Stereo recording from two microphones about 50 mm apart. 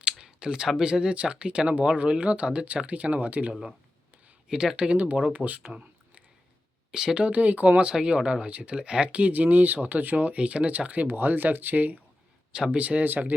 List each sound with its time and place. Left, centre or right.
0.0 s a sound: centre
0.8 s speech: centre; by 3.5 s right
3.5 s speech: centre
4.9 s speech: right
5.7 s a sound: right
6.9 s speech: centre
7.2 s speech: right
7.9 s speech: centre; by 10.3 s right
10.3 s speech: right